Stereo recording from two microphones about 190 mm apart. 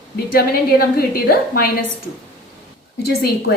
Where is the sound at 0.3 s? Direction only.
55° left (ahead or behind).